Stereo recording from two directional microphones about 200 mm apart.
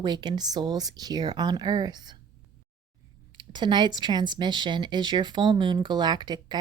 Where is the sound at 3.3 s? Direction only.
25° right (ahead or behind).